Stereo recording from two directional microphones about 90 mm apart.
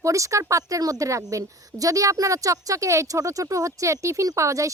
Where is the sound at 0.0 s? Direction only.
35° right (ahead or behind).